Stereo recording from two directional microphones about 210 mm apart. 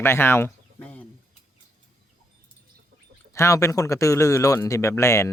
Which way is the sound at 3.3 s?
15° left (ahead or behind).